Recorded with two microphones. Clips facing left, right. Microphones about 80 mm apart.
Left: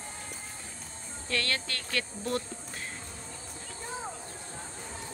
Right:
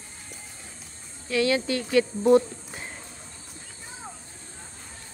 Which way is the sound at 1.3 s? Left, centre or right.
Centre.